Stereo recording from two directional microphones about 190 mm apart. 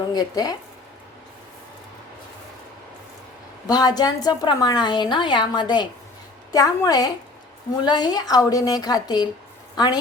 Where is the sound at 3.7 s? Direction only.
20° left (ahead or behind).